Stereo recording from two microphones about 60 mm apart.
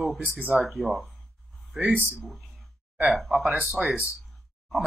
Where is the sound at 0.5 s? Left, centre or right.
Centre.